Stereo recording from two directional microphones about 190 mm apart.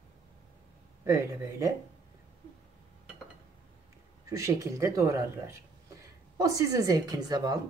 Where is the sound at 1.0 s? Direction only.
15° right (ahead or behind).